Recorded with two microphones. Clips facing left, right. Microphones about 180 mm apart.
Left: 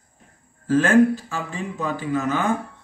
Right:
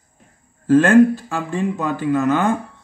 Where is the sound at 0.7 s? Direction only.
55° right (ahead or behind).